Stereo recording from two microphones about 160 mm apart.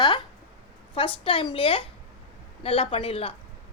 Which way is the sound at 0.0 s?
30° left (ahead or behind).